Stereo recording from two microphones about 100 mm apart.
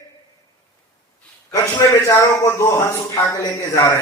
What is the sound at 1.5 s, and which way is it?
A man's voice, 30° left (ahead or behind).